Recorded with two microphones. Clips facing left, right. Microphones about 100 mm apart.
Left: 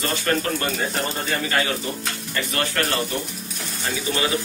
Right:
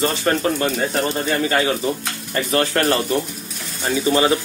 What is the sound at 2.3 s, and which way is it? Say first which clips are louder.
Speech: right 7 dB; 30° right (ahead or behind).